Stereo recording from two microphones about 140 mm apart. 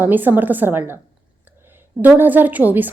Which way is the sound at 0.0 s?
15° right (ahead or behind).